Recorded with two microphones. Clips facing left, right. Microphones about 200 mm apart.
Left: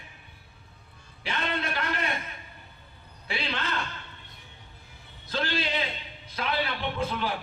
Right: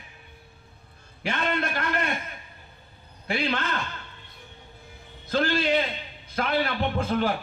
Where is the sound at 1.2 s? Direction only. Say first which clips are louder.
Right 4 dB; 50° right (ahead or behind).